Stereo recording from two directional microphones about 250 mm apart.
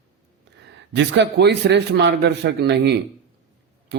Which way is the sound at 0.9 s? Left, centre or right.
Right.